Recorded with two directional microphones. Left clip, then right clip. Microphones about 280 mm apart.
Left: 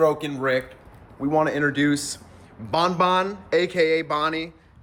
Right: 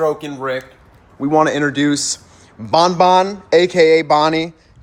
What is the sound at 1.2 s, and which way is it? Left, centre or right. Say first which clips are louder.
Speech: right 7 dB; right.